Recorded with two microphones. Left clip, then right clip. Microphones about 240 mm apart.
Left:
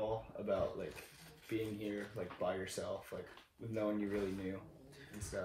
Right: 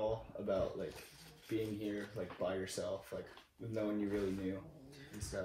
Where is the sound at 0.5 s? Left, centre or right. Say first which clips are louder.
Even; centre.